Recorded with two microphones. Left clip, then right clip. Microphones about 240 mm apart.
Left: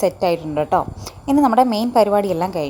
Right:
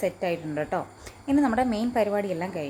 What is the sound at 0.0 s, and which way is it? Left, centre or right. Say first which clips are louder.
A woman's voice: left 9 dB; left.